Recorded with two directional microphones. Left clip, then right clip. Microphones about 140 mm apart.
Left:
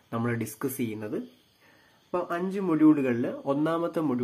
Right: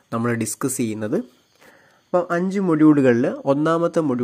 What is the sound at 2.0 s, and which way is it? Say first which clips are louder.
Speech: right 9 dB; 60° right (ahead or behind).